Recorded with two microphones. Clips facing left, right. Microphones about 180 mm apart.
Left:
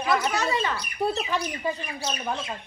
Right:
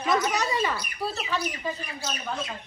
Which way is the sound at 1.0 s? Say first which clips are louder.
Left 5 dB; 20° left (ahead or behind).